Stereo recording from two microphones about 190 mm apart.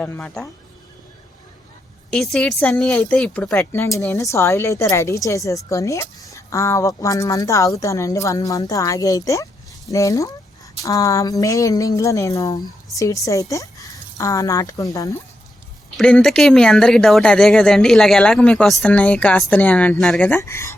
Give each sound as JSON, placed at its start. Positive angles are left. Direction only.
{"t": 0.0, "sound": "a woman's voice", "side_deg": 5}
{"t": 2.3, "sound": "a woman's voice", "side_deg": 5}
{"t": 16.0, "sound": "speech", "side_deg": 5}